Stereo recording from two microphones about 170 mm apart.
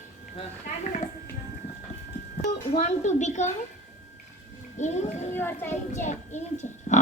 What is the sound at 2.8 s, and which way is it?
Speech, 45° left (ahead or behind).